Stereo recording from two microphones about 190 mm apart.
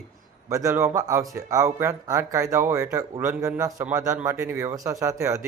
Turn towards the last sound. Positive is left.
turn(degrees=-15)  # may be behind; listen again after turning